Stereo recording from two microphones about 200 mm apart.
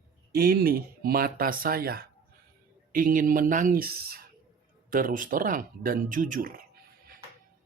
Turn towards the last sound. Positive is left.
turn(degrees=-45)  # may be behind; listen again after turning